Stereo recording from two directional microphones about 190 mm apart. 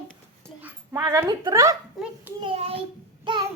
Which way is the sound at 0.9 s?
15° right (ahead or behind).